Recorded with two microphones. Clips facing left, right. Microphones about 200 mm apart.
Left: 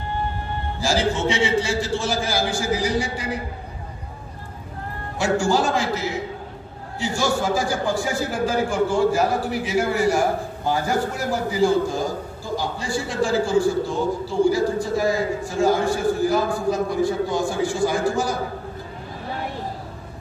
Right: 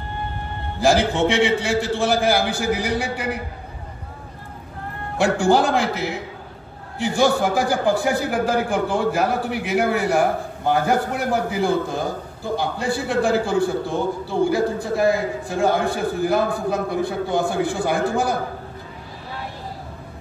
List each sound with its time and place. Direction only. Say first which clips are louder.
0.7 s a man's voice: right 5 dB; 60° right (ahead or behind)
5.1 s a man's voice: right 3 dB; 60° right (ahead or behind)